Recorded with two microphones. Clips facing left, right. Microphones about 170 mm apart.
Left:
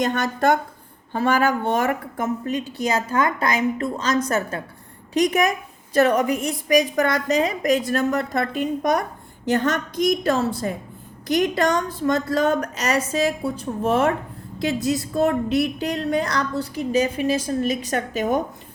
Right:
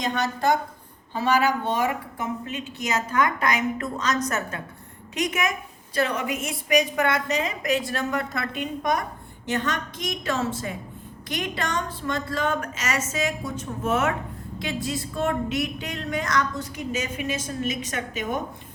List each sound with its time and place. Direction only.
0.0 s a woman's voice: 50° left (ahead or behind)